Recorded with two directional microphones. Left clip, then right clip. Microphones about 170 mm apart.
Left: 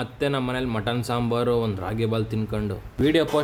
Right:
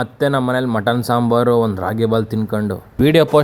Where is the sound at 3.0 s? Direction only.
35° right (ahead or behind).